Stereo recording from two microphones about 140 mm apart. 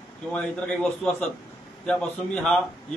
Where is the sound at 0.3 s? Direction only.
5° left (ahead or behind).